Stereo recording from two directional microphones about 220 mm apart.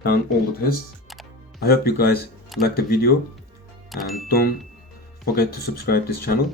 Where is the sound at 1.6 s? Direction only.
45° left (ahead or behind).